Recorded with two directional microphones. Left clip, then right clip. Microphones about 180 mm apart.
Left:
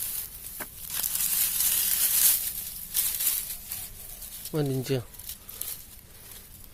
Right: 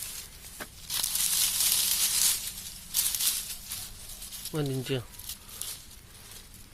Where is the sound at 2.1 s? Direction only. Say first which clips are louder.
Even; 20° left (ahead or behind).